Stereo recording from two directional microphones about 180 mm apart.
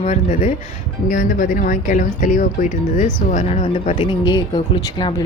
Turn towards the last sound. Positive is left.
turn(degrees=25)  # may be behind; listen again after turning